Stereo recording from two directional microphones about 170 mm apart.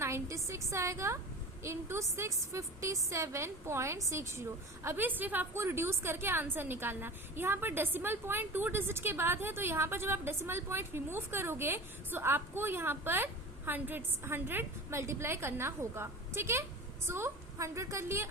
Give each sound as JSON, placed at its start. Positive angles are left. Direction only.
{"t": 0.0, "sound": "a woman's voice", "side_deg": -15}